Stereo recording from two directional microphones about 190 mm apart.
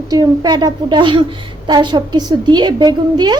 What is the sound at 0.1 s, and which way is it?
A child's voice, 20° right (ahead or behind).